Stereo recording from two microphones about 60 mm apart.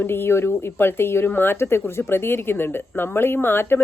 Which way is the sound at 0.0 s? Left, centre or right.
Left.